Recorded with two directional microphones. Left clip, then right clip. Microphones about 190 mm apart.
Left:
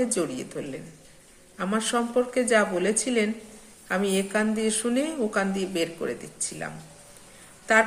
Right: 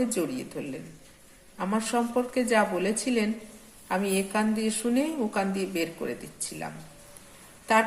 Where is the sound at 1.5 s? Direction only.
15° left (ahead or behind).